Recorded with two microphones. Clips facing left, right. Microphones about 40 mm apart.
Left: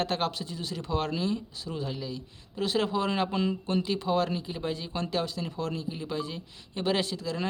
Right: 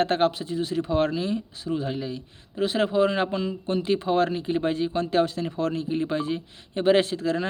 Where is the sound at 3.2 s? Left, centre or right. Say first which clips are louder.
Right 1 dB; centre.